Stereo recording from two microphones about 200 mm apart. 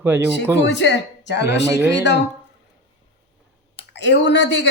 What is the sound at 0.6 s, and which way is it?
Speech, 60° left (ahead or behind).